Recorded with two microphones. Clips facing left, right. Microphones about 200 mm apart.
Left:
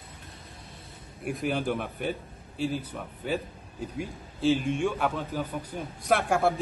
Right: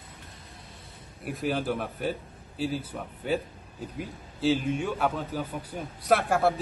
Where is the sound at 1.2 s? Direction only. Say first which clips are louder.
Even; centre (ahead or behind).